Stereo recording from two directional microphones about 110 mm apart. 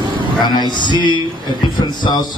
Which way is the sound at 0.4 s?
40° left (ahead or behind).